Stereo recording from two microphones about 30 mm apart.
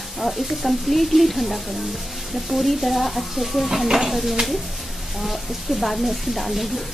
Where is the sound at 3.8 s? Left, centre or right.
Centre.